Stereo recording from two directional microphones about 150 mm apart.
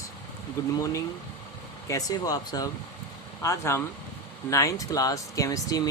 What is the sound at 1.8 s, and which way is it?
Speech, 25° left (ahead or behind).